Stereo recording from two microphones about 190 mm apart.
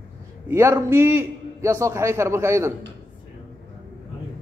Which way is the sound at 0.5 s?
15° right (ahead or behind).